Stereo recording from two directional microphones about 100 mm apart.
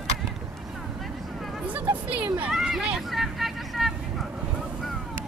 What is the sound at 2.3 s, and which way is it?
Vehicle, 10° right (ahead or behind).